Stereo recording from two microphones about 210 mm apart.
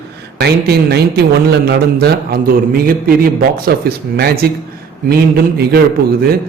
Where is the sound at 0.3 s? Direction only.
50° right (ahead or behind).